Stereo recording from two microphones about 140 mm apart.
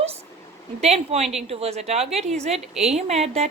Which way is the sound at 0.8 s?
50° right (ahead or behind).